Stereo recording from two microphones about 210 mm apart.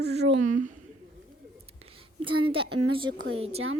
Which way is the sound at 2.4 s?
25° right (ahead or behind).